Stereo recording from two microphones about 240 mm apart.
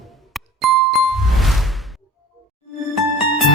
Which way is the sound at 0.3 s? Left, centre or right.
Centre.